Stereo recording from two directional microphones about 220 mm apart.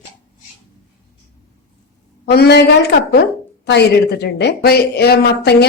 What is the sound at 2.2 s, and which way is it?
A woman's voice, 50° left (ahead or behind).